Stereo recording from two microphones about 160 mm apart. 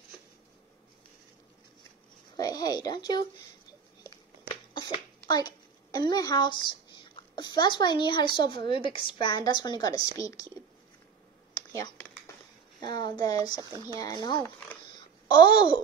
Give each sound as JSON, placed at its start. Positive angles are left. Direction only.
{"t": 2.3, "sound": "speech", "side_deg": 25}
{"t": 4.7, "sound": "a sound", "side_deg": 30}
{"t": 7.2, "sound": "speech", "side_deg": 30}
{"t": 11.5, "sound": "computer keyboard", "side_deg": 20}
{"t": 12.8, "sound": "speech", "side_deg": 30}
{"t": 13.6, "sound": "speech", "side_deg": -25}
{"t": 14.2, "sound": "speech", "side_deg": 25}
{"t": 15.0, "sound": "a sound", "side_deg": 30}